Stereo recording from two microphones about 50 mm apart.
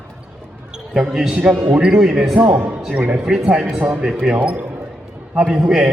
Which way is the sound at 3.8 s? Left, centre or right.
Right.